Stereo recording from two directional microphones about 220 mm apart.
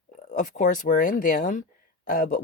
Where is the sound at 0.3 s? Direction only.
35° left (ahead or behind).